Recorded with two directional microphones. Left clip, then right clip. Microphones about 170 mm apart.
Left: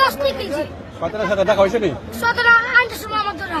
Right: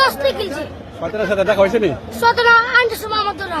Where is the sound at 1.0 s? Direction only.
15° right (ahead or behind).